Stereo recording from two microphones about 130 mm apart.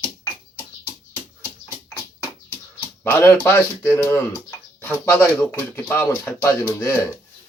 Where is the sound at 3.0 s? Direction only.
15° left (ahead or behind).